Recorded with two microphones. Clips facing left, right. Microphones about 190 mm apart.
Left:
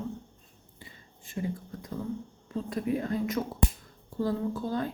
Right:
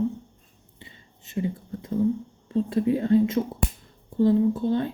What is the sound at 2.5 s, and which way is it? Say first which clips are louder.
A woman's voice: right 7 dB; 30° right (ahead or behind).